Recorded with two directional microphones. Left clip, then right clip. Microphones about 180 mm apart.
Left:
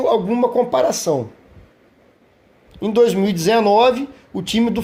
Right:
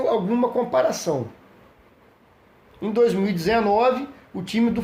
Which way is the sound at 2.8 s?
40° left (ahead or behind).